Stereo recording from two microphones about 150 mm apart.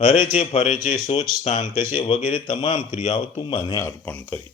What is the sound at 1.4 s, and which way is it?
A man's voice, 45° left (ahead or behind).